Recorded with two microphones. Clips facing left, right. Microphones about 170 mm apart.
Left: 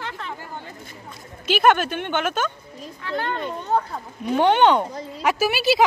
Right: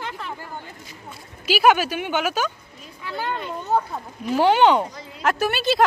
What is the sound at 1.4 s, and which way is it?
A child's voice, 5° right (ahead or behind).